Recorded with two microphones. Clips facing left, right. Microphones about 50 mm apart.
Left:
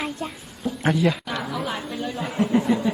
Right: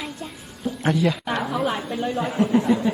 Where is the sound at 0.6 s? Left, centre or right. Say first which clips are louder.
Even; centre.